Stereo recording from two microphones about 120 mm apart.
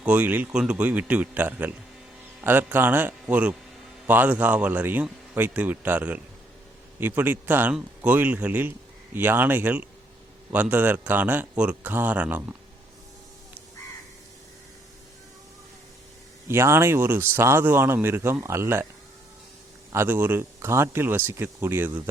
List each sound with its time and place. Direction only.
0.0 s a man's voice: 15° right (ahead or behind)
16.5 s speech: 20° right (ahead or behind)
19.9 s speech: 20° right (ahead or behind)